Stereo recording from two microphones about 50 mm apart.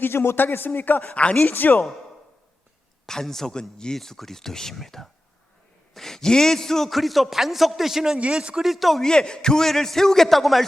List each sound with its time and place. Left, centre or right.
0.0 s a man's voice: left
1.1 s speech: left
1.5 s speech: left
3.1 s a man's voice: centre
8.7 s a man's voice: centre
9.0 s speech: centre